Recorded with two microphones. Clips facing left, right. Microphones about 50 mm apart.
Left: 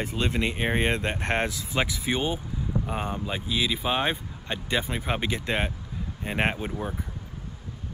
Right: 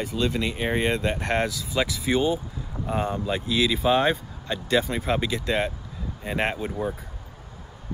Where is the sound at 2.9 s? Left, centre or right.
Centre.